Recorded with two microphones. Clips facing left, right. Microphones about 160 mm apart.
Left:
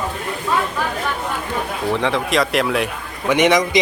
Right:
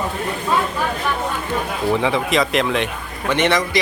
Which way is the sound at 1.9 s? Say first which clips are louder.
Even; centre (ahead or behind).